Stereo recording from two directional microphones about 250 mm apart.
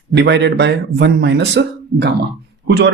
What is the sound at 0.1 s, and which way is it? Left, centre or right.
Speech, right.